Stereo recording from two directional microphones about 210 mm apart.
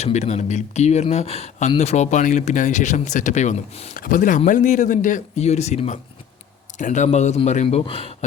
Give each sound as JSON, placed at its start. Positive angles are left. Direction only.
{"t": 0.0, "sound": "speech", "side_deg": 30}